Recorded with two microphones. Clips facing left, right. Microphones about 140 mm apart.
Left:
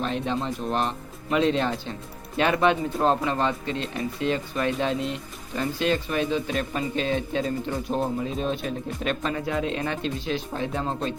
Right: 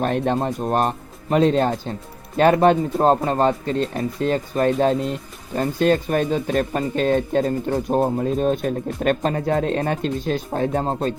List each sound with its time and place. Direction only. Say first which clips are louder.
0.0 s speech: right 6 dB; 50° right (ahead or behind)